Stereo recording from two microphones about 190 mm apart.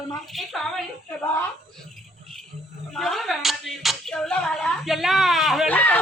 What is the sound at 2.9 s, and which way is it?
Speech, centre (ahead or behind).